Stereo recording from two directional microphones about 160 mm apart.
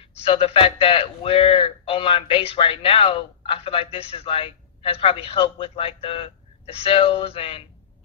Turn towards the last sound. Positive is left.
turn(degrees=35)  # may be behind; listen again after turning